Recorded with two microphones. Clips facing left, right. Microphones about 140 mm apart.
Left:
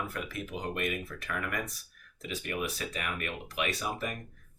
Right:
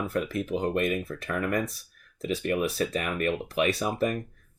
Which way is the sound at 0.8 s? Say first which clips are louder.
Right 7 dB; 35° right (ahead or behind).